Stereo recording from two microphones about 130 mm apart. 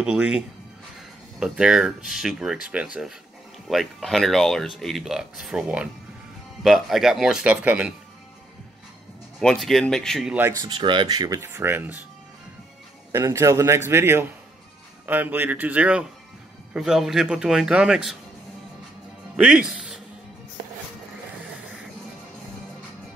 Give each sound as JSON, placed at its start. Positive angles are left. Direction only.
{"t": 0.0, "sound": "a man's voice", "side_deg": -5}
{"t": 1.4, "sound": "speech", "side_deg": -5}
{"t": 9.4, "sound": "speech", "side_deg": 5}
{"t": 10.5, "sound": "speech", "side_deg": -35}
{"t": 13.1, "sound": "a man's voice", "side_deg": -20}
{"t": 19.3, "sound": "speech", "side_deg": -5}